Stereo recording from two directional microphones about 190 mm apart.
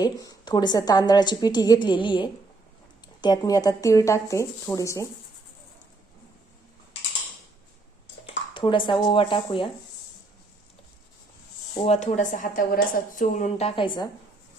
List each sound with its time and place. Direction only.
0.0 s a woman's voice: 20° left (ahead or behind)
8.5 s a woman's voice: 25° left (ahead or behind)
11.9 s a woman's voice: 40° left (ahead or behind)